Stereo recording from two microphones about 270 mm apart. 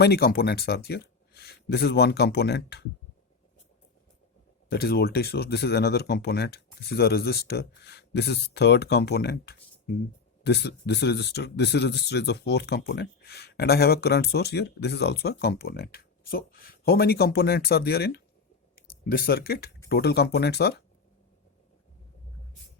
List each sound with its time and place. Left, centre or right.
0.0 s speech: left
4.7 s speech: left